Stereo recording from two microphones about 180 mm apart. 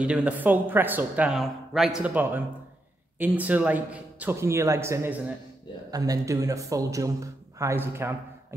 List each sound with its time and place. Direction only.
0.0 s speech: 5° right (ahead or behind)